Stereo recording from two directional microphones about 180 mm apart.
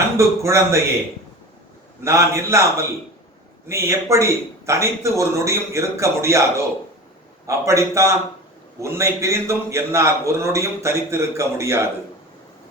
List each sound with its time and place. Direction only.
0.2 s a man's voice: 15° right (ahead or behind)
2.0 s a man's voice: 15° right (ahead or behind)